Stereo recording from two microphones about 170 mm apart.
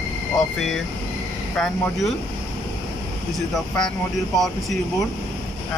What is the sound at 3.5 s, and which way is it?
Speech, 5° left (ahead or behind).